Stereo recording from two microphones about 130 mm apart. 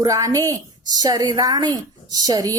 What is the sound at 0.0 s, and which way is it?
A woman's voice, 25° right (ahead or behind).